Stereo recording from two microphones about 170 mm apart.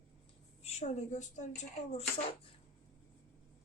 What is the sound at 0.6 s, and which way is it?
Speech, 40° left (ahead or behind).